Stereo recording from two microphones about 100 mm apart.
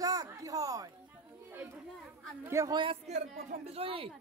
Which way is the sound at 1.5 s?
20° right (ahead or behind).